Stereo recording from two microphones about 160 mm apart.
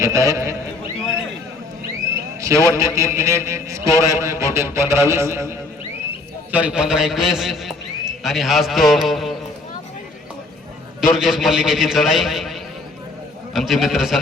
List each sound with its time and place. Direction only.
0.0 s a man's voice: 20° right (ahead or behind)
2.4 s a man's voice: 20° right (ahead or behind); by 9.3 s centre (ahead or behind)
11.0 s a man's voice: 5° right (ahead or behind)